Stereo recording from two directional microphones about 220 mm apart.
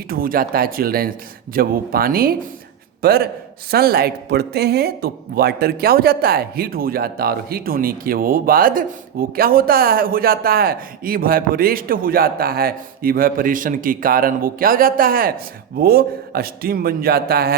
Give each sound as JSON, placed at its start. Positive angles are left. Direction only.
{"t": 0.1, "sound": "a man's voice", "side_deg": -40}